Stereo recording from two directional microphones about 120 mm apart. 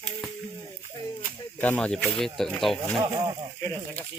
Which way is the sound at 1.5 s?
15° left (ahead or behind).